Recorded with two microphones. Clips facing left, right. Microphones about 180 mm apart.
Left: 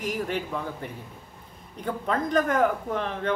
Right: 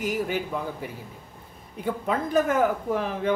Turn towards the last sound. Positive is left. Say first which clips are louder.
# right 2 dB
turn(degrees=-5)  # may be behind; listen again after turning